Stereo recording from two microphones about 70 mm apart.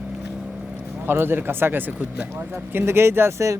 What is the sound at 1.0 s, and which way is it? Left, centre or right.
Speech, right.